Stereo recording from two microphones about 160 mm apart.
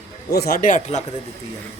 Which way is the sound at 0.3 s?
75° left (ahead or behind).